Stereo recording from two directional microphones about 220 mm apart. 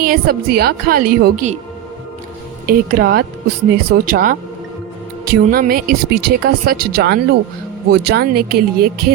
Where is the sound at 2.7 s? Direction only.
40° right (ahead or behind).